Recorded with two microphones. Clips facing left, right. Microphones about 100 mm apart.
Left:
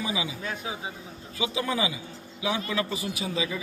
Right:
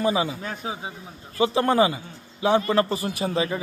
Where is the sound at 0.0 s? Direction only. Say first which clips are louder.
Right 8 dB; 55° right (ahead or behind).